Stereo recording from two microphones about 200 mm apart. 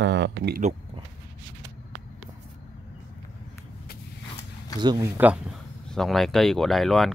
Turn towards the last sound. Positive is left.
turn(degrees=0)  # may be behind; listen again after turning